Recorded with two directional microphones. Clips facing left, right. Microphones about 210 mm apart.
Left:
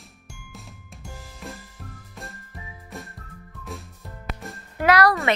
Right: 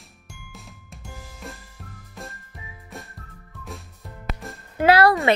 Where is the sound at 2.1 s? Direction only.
Centre (ahead or behind).